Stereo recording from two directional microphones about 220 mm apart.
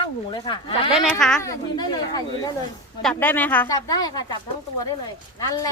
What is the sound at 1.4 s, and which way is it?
Speech, 15° left (ahead or behind).